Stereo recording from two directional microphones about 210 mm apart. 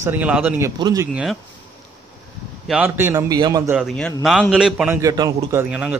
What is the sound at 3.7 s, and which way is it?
A man's voice, centre (ahead or behind).